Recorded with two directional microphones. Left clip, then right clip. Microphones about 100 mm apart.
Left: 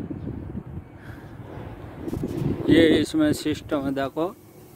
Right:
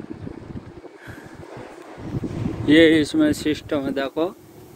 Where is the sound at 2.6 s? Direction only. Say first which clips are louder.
Right 4 dB; 30° left (ahead or behind).